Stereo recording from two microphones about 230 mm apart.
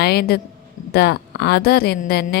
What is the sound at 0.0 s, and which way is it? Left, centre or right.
A woman's voice, left.